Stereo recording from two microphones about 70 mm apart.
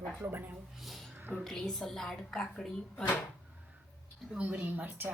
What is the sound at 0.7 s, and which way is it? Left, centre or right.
Speech, centre.